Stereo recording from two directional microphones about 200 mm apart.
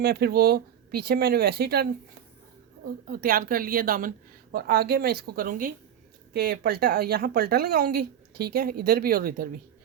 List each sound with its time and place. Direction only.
0.0 s a woman's voice: 50° right (ahead or behind)
6.3 s a woman's voice: 50° right (ahead or behind)